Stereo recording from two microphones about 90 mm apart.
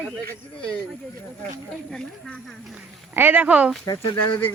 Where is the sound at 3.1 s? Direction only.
20° right (ahead or behind).